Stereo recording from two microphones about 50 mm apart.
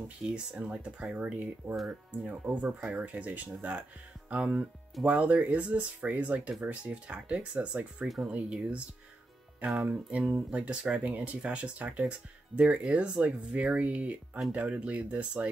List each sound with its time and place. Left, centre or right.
0.2 s speech: centre
9.8 s speech: right
12.8 s speech: centre